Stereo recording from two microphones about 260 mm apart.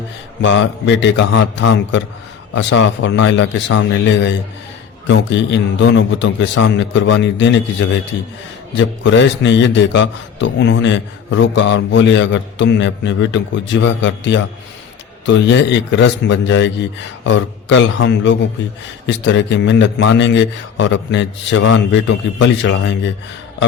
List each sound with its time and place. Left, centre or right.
0.4 s a man's voice: left